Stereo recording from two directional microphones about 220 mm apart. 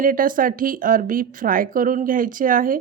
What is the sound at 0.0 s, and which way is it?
A woman's voice, 40° right (ahead or behind).